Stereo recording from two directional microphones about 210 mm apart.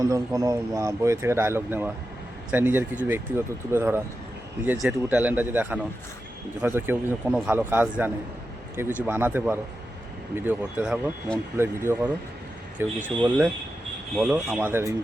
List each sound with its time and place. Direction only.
0.0 s speech: 15° right (ahead or behind)
14.2 s speech: 5° right (ahead or behind)